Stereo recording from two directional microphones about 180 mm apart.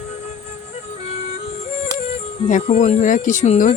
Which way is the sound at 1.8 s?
35° left (ahead or behind).